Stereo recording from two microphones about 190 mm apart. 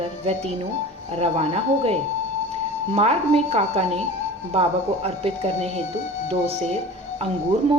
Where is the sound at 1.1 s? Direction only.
35° right (ahead or behind).